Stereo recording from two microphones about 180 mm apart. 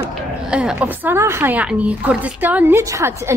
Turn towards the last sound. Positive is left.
turn(degrees=-15)  # may be behind; listen again after turning